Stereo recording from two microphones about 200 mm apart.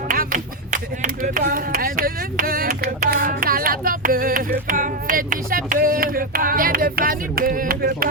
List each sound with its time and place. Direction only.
0.1 s speech: 45° right (ahead or behind)